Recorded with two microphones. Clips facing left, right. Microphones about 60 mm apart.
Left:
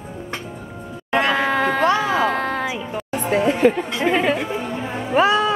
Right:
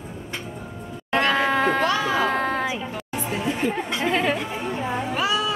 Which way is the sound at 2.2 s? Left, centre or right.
Centre.